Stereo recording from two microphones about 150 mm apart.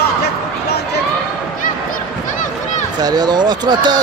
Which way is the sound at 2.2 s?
60° left (ahead or behind).